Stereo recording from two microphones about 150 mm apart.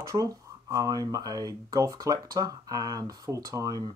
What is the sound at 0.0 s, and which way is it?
Speech, 20° right (ahead or behind).